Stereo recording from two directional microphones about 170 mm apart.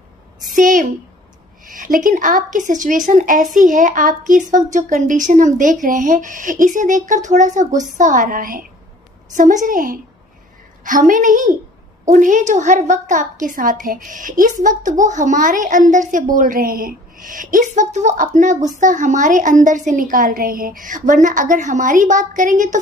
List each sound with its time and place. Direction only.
0.5 s a woman's voice: 50° right (ahead or behind)